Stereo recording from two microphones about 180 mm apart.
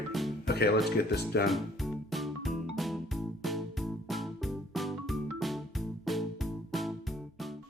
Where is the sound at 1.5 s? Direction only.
Centre (ahead or behind).